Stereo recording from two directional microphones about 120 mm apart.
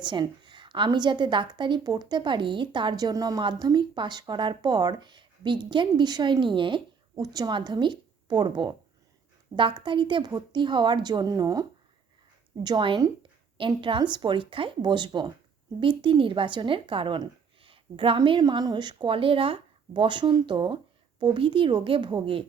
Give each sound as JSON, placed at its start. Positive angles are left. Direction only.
{"t": 0.0, "sound": "a woman's voice", "side_deg": -40}
{"t": 12.6, "sound": "a woman's voice", "side_deg": -40}